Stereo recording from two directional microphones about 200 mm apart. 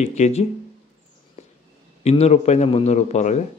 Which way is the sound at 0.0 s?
35° left (ahead or behind).